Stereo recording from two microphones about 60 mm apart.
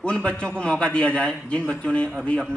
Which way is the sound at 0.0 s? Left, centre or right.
Centre.